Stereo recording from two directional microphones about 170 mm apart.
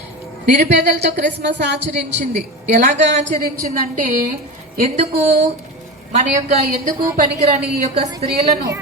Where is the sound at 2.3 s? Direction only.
45° right (ahead or behind).